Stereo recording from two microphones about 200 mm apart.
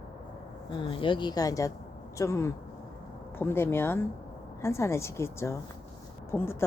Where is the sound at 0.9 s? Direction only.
25° left (ahead or behind).